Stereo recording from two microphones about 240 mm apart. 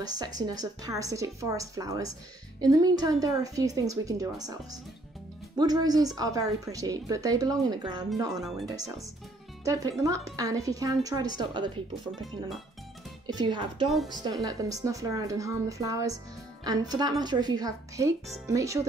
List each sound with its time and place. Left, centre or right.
0.0 s a woman's voice: centre
5.6 s a woman's voice: centre
8.4 s speech: centre
8.6 s a woman's voice: centre
12.1 s speech: centre
13.3 s a woman's voice: centre